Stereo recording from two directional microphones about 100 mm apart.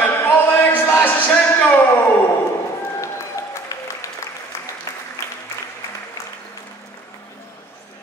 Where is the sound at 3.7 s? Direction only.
30° left (ahead or behind).